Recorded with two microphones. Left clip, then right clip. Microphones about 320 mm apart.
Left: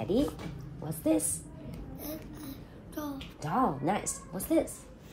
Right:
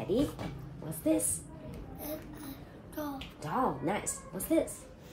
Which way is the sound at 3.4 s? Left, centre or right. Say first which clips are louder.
Left 3 dB; left.